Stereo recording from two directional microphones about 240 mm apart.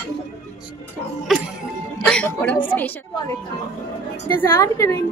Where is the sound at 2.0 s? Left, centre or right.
Centre.